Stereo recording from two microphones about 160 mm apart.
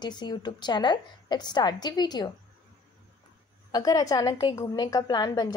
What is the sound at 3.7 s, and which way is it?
A woman's voice, 25° left (ahead or behind).